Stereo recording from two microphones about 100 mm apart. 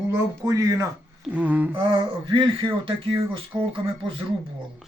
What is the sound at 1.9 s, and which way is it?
Speech, 55° right (ahead or behind).